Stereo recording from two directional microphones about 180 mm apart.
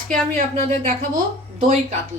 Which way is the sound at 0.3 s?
35° right (ahead or behind).